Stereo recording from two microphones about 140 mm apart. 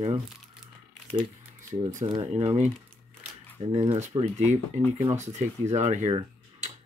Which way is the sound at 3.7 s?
50° right (ahead or behind).